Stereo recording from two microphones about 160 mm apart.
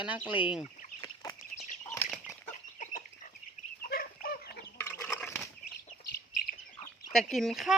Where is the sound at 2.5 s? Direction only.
50° left (ahead or behind).